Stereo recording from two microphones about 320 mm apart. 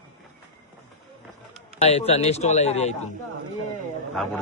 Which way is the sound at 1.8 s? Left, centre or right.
Centre.